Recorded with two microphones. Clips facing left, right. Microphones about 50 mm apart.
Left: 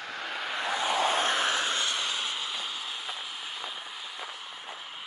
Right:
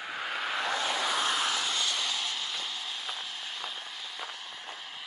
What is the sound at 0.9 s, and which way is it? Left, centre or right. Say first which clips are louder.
Vehicle: left 3 dB; left.